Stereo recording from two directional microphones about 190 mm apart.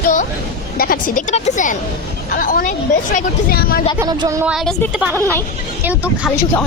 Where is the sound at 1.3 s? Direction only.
40° left (ahead or behind).